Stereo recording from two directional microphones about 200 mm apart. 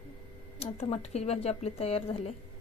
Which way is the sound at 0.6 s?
30° left (ahead or behind).